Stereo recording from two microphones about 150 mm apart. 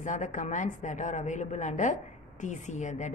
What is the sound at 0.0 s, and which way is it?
A woman's voice, 55° left (ahead or behind).